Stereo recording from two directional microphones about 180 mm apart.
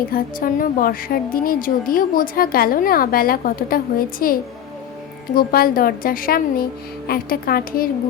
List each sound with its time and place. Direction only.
0.1 s a woman's voice: 50° left (ahead or behind)